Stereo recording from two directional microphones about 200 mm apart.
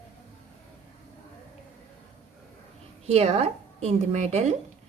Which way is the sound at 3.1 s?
30° right (ahead or behind).